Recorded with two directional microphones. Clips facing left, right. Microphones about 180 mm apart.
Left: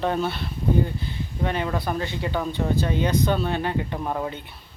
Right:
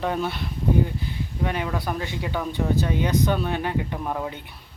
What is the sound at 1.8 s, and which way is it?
Speech, 15° right (ahead or behind).